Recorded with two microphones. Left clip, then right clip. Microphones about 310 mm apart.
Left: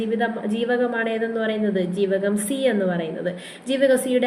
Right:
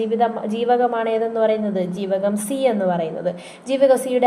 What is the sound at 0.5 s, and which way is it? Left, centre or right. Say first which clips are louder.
A woman's voice: right 3 dB; right.